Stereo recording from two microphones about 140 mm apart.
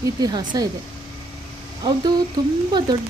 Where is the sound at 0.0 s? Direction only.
25° right (ahead or behind).